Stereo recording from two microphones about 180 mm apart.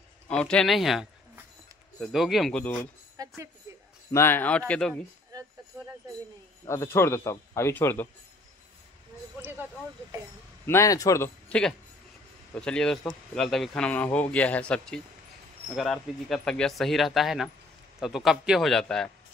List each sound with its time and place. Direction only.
0.3 s speech: 5° left (ahead or behind)
3.2 s speech: 20° right (ahead or behind)
4.1 s a man's voice: 15° left (ahead or behind)
6.6 s a man's voice: 15° left (ahead or behind)
9.4 s speech: 10° right (ahead or behind)
10.7 s a man's voice: 15° left (ahead or behind)